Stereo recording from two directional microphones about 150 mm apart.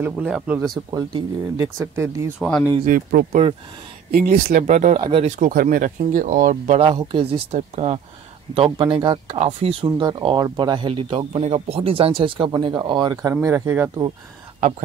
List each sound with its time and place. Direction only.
0.0 s speech: 10° right (ahead or behind)
0.9 s speech: 25° right (ahead or behind)
2.8 s speech: 65° right (ahead or behind)
6.8 s speech: 35° right (ahead or behind)
7.5 s speech: 45° right (ahead or behind)
9.3 s speech: 40° right (ahead or behind)
9.8 s speech: 30° right (ahead or behind)
13.3 s speech: 15° right (ahead or behind)